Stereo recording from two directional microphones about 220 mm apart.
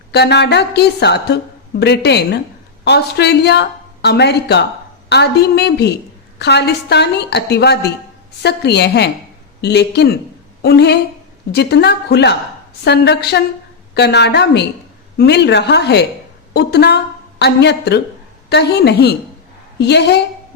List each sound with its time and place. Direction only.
0.1 s a woman's voice: 50° left (ahead or behind)